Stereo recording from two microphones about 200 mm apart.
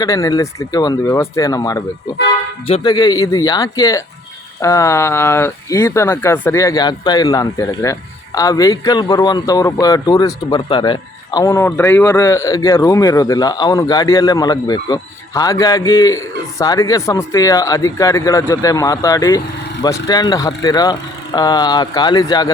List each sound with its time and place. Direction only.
0.0 s a man's voice: 15° left (ahead or behind)